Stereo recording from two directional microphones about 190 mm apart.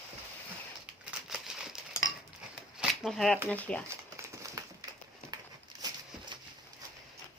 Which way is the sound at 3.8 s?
15° right (ahead or behind).